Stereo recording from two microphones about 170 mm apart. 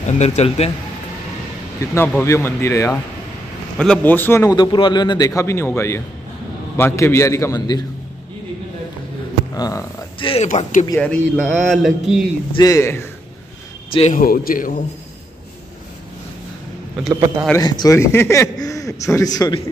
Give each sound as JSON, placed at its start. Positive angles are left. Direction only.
{"t": 0.0, "sound": "speech", "side_deg": 40}
{"t": 2.0, "sound": "a man's voice", "side_deg": 15}
{"t": 3.7, "sound": "a man's voice", "side_deg": 5}
{"t": 9.6, "sound": "a man's voice", "side_deg": 20}
{"t": 10.1, "sound": "speech", "side_deg": 35}
{"t": 11.0, "sound": "speech", "side_deg": 5}
{"t": 12.5, "sound": "a man's voice", "side_deg": 20}
{"t": 14.1, "sound": "a man's voice", "side_deg": 60}
{"t": 17.1, "sound": "a man's voice", "side_deg": -20}
{"t": 17.6, "sound": "a man's voice", "side_deg": 25}